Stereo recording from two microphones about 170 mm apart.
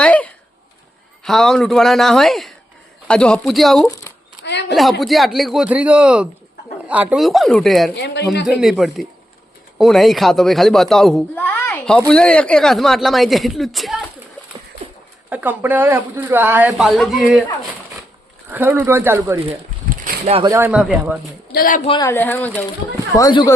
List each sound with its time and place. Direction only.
0.0 s a sound: 10° left (ahead or behind)
1.2 s speech: centre (ahead or behind)
3.8 s speech: 15° left (ahead or behind)
4.7 s speech: centre (ahead or behind)
7.9 s speech: 85° left
8.4 s speech: centre (ahead or behind)
15.3 s speech: 10° right (ahead or behind)
18.5 s speech: 10° right (ahead or behind)
20.4 s speech: 15° right (ahead or behind)
20.7 s speech: 5° right (ahead or behind)
21.5 s speech: 55° left (ahead or behind)
22.0 s speech: 15° left (ahead or behind)
23.1 s speech: 25° left (ahead or behind)